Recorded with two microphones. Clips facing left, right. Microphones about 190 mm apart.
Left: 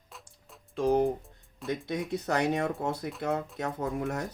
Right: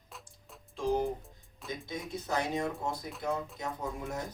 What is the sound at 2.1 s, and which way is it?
Speech, 70° left (ahead or behind).